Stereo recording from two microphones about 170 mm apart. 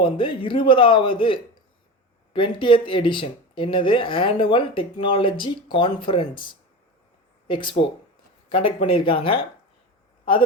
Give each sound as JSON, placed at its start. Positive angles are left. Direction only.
{"t": 0.0, "sound": "speech", "side_deg": 30}